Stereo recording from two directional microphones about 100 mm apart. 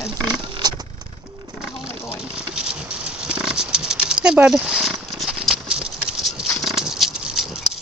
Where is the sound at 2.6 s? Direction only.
5° right (ahead or behind).